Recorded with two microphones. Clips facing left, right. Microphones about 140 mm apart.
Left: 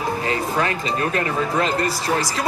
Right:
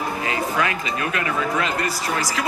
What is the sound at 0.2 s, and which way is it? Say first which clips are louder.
Speech: right 1 dB; 35° left (ahead or behind).